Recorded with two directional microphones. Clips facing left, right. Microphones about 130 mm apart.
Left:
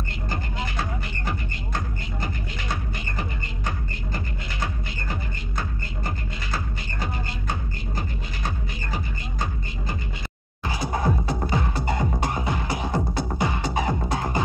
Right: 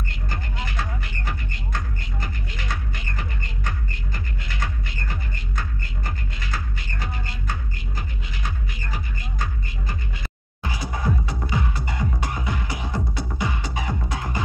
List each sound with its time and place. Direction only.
2.2 s music: 30° left (ahead or behind)
8.5 s music: 25° left (ahead or behind)
10.7 s music: 35° left (ahead or behind)